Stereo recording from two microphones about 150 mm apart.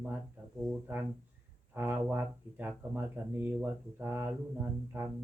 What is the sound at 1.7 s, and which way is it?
Speech, 15° right (ahead or behind).